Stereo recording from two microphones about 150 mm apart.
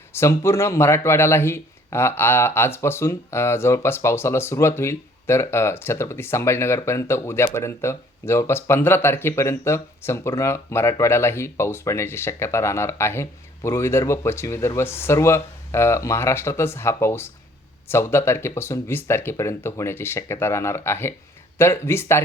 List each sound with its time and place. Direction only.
0.1 s speech: 20° left (ahead or behind)